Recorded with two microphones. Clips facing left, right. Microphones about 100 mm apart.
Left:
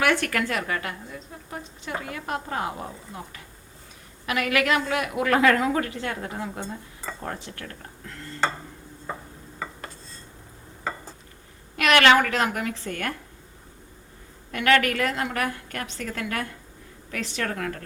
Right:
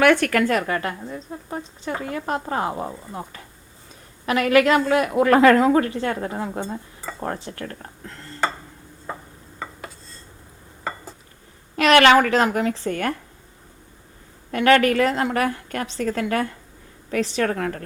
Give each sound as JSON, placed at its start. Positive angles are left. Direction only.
{"t": 0.0, "sound": "a woman's voice", "side_deg": -55}
{"t": 4.3, "sound": "a woman's voice", "side_deg": -35}
{"t": 9.6, "sound": "dishes", "side_deg": 0}
{"t": 11.8, "sound": "a woman's voice", "side_deg": -30}
{"t": 14.5, "sound": "a woman's voice", "side_deg": -30}